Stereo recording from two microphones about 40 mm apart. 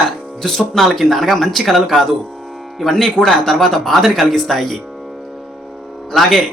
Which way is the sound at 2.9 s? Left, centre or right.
Centre.